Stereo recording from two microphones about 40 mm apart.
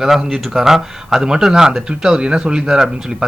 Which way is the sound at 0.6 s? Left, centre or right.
Centre.